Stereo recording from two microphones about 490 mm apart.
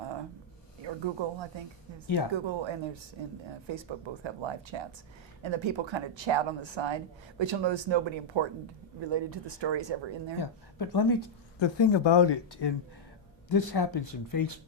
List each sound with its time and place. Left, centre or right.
0.9 s speech: right
10.4 s speech: left